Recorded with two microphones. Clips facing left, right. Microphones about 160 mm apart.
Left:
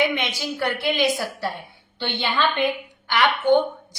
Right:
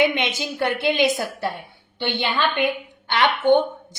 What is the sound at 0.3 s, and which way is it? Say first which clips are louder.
A woman's voice: right 2 dB; 20° right (ahead or behind).